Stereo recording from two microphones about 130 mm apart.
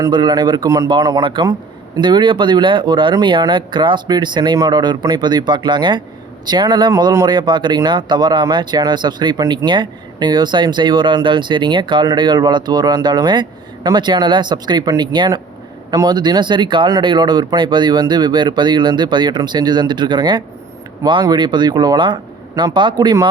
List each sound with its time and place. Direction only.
0.0 s speech: 35° right (ahead or behind)